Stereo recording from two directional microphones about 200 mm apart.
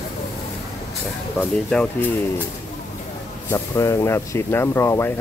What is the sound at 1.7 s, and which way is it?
Speech, 5° left (ahead or behind).